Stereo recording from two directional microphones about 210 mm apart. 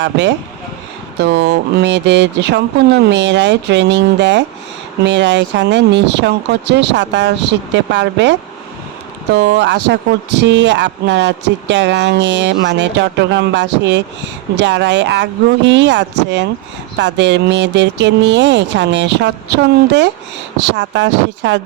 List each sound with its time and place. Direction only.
0.0 s speech: 60° right (ahead or behind)
9.4 s speech: 55° right (ahead or behind)